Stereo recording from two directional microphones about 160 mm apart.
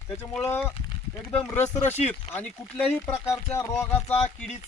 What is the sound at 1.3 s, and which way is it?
A man's voice, 10° left (ahead or behind).